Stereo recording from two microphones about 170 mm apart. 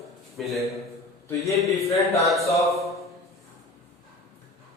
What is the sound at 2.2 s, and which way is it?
Speech, centre (ahead or behind).